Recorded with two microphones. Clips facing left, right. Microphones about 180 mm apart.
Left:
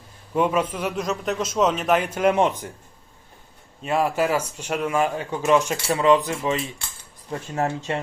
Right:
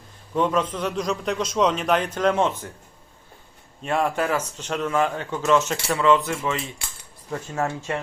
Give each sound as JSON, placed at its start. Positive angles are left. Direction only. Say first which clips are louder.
{"t": 0.3, "sound": "a man's voice", "louder": "left 1 dB", "side_deg": 10}
{"t": 3.8, "sound": "a man's voice", "louder": "left 1 dB", "side_deg": 5}
{"t": 7.3, "sound": "speech", "louder": "left 1 dB", "side_deg": 35}